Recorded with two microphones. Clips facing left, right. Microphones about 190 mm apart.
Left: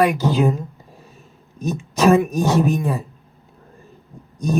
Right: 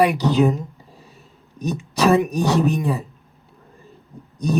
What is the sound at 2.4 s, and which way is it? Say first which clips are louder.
Speech: left 1 dB; 15° left (ahead or behind).